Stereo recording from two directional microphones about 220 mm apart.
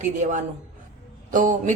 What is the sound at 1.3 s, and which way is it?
Speech, 35° right (ahead or behind).